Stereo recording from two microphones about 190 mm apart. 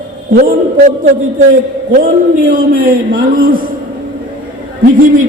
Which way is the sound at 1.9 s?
45° right (ahead or behind).